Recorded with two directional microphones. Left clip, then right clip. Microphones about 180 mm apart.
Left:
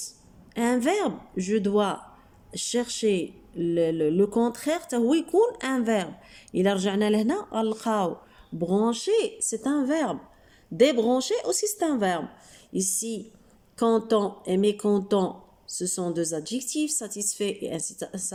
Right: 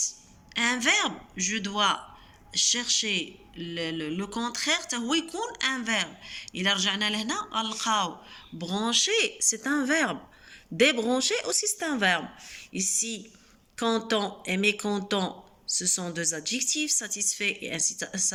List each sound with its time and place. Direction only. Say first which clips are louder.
0.5 s speech: even; 45° left (ahead or behind)